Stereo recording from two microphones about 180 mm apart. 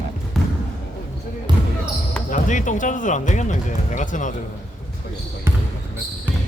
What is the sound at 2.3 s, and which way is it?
Speech, 45° left (ahead or behind).